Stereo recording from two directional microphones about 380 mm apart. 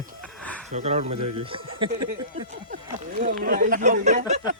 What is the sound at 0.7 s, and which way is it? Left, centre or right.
Speech, centre.